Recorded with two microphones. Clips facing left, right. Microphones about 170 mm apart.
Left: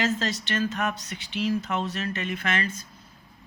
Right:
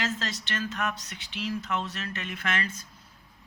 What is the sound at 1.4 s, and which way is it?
Speech, 45° left (ahead or behind).